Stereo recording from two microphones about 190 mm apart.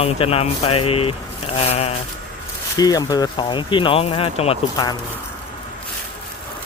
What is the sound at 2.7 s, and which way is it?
Speech, 20° left (ahead or behind).